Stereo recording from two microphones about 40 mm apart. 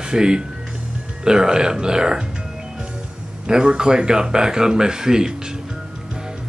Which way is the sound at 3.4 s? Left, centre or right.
Centre.